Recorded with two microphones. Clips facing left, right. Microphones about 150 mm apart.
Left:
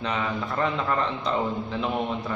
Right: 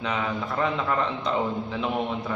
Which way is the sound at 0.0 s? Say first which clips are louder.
Even; centre (ahead or behind).